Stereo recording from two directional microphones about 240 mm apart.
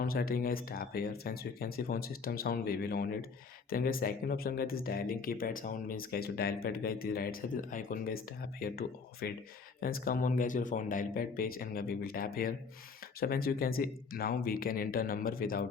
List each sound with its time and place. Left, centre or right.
0.0 s speech: left